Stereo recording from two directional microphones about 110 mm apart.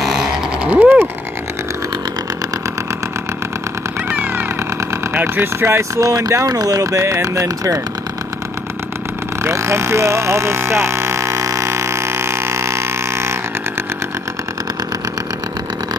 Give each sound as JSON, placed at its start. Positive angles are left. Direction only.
{"t": 0.7, "sound": "a sound", "side_deg": -15}
{"t": 4.1, "sound": "vehicle", "side_deg": -15}
{"t": 5.1, "sound": "speech", "side_deg": -20}
{"t": 9.4, "sound": "hum", "side_deg": -25}